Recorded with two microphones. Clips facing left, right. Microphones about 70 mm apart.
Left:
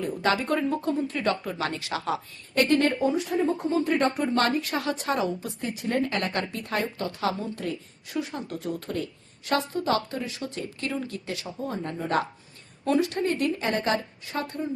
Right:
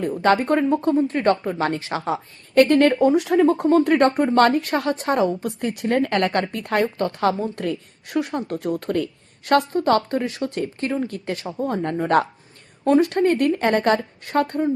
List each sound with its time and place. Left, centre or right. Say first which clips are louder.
0.0 s speech: right 7 dB; right
2.6 s speech: right 7 dB; right
5.5 s speech: right 6 dB; right
10.8 s speech: right 7 dB; right
12.8 s speech: right 7 dB; right